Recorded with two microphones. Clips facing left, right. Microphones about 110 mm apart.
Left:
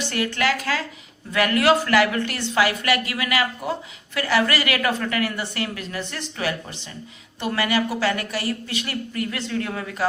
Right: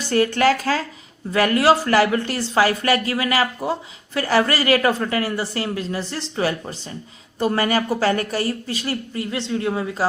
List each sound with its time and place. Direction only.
0.0 s speech: 40° right (ahead or behind)